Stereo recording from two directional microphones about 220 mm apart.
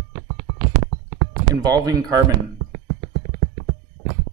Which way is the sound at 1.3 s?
15° right (ahead or behind).